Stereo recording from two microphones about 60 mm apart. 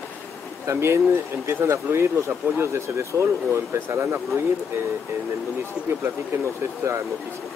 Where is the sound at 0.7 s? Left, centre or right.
Right.